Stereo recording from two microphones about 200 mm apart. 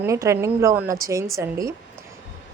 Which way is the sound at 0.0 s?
15° right (ahead or behind).